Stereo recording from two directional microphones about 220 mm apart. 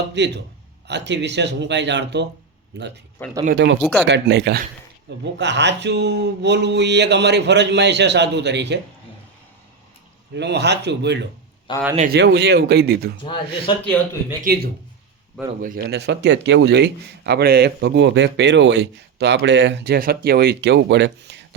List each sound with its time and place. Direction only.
0.1 s a man's voice: 50° right (ahead or behind)
10.3 s a man's voice: 50° right (ahead or behind)
13.2 s speech: 20° left (ahead or behind)
14.4 s a man's voice: 45° right (ahead or behind)